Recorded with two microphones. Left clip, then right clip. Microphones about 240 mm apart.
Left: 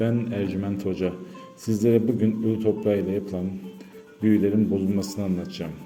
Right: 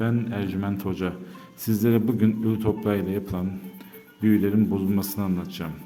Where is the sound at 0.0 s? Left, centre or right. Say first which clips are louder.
Left 2 dB; centre.